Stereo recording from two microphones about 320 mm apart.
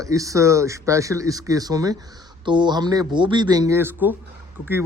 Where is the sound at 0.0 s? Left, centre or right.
Centre.